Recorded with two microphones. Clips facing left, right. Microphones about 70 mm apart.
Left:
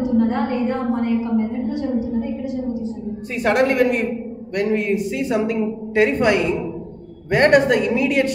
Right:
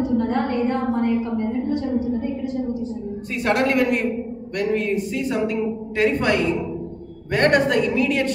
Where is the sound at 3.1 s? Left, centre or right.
Centre.